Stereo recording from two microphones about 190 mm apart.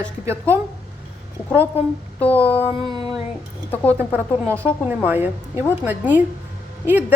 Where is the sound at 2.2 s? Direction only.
10° left (ahead or behind).